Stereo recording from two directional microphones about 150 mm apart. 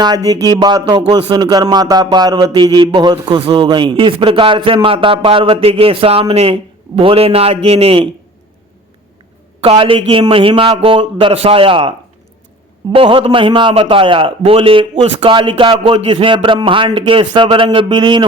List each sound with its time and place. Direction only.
0.0 s a man's voice: 25° right (ahead or behind); by 8.0 s 40° right (ahead or behind)
9.6 s a man's voice: 40° right (ahead or behind)